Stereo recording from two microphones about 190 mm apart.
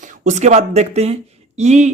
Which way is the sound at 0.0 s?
40° right (ahead or behind).